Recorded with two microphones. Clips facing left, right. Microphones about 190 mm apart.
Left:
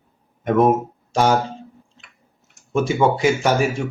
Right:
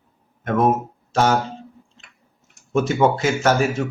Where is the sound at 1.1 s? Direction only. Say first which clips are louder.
Left 1 dB; 10° left (ahead or behind).